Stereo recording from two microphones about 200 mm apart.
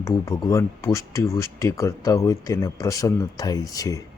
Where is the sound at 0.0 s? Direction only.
15° left (ahead or behind).